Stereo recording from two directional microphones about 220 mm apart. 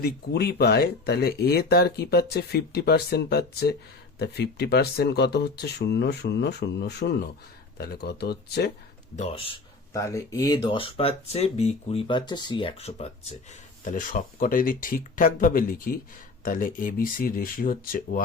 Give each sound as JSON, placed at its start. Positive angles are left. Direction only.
{"t": 0.0, "sound": "speech", "side_deg": 45}
{"t": 9.1, "sound": "speech", "side_deg": 30}
{"t": 10.0, "sound": "speech", "side_deg": 15}
{"t": 13.8, "sound": "speech", "side_deg": 35}